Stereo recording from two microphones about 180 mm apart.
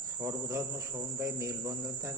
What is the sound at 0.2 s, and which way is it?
Speech, 15° right (ahead or behind).